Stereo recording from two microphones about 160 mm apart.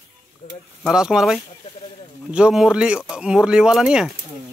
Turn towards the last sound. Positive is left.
turn(degrees=-5)  # may be behind; listen again after turning